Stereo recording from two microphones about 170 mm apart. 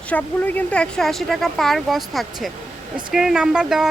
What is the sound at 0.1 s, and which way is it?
Speech, 10° left (ahead or behind).